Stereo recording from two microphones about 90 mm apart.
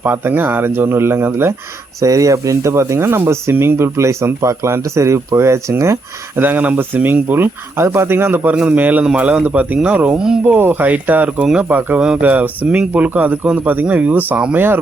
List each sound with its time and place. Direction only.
0.0 s speech: 20° right (ahead or behind)
2.0 s speech: 40° right (ahead or behind); by 10.4 s 10° right (ahead or behind)
10.4 s speech: 25° right (ahead or behind)